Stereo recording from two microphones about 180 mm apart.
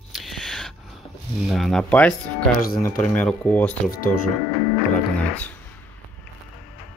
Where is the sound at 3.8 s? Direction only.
50° left (ahead or behind).